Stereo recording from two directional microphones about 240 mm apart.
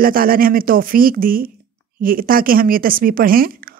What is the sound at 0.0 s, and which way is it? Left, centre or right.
A woman's voice, right.